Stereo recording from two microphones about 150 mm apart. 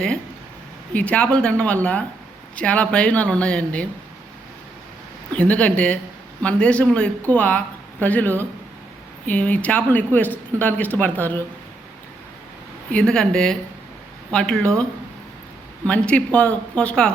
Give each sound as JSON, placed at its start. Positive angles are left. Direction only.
{"t": 0.9, "sound": "a woman's voice", "side_deg": 10}
{"t": 5.3, "sound": "a woman's voice", "side_deg": 10}
{"t": 12.9, "sound": "a woman's voice", "side_deg": 5}
{"t": 15.9, "sound": "a woman's voice", "side_deg": 10}